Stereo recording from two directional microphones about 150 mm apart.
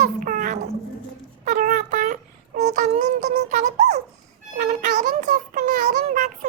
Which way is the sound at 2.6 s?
55° right (ahead or behind).